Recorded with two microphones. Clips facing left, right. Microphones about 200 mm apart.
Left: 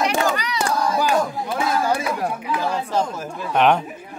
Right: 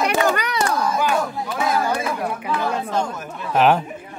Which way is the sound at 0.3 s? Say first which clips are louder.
Right 3 dB; 55° right (ahead or behind).